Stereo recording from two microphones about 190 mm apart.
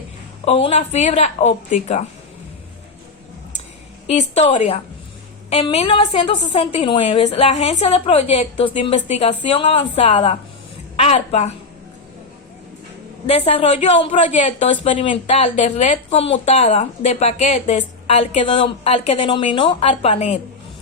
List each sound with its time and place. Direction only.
0.4 s speech: 30° left (ahead or behind)
4.0 s speech: 35° left (ahead or behind)
13.2 s speech: 30° left (ahead or behind)